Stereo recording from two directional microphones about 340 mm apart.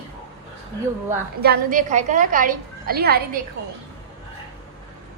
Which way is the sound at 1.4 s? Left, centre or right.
Right.